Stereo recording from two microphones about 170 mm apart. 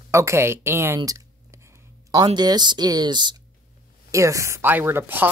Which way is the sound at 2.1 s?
25° right (ahead or behind).